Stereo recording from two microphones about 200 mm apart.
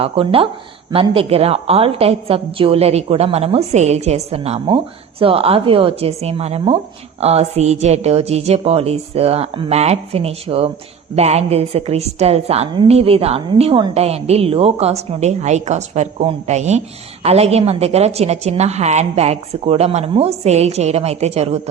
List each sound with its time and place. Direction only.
0.0 s a woman's voice: 30° right (ahead or behind)